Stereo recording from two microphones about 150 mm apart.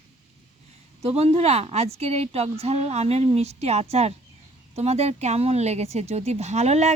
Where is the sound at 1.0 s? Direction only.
40° right (ahead or behind).